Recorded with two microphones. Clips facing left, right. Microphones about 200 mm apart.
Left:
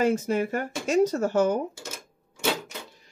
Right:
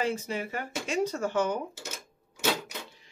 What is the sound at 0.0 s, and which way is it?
Speech, 45° left (ahead or behind).